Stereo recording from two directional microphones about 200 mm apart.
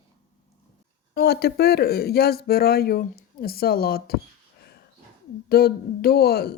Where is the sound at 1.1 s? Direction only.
50° left (ahead or behind).